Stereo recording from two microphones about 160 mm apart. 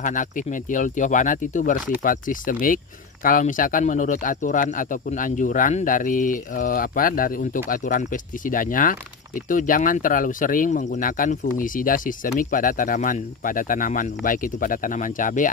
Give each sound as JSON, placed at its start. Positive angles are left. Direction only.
{"t": 0.0, "sound": "speech", "side_deg": 55}